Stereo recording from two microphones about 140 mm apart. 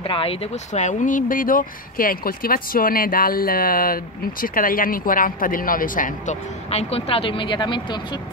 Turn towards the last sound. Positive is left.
turn(degrees=35)  # may be behind; listen again after turning